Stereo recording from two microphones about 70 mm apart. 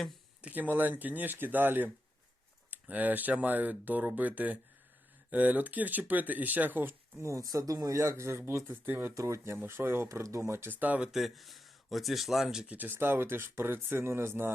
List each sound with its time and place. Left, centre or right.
0.4 s speech: right
7.2 s speech: right
7.4 s speech: right
9.1 s speech: right
10.8 s speech: right
11.0 s speech: centre
12.7 s speech: right